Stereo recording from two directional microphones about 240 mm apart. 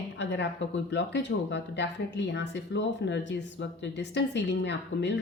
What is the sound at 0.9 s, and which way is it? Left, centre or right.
Speech, left.